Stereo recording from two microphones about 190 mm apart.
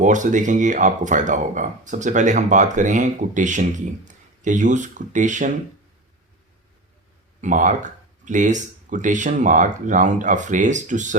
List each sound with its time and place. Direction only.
0.0 s speech: 40° right (ahead or behind)
7.4 s speech: 40° right (ahead or behind)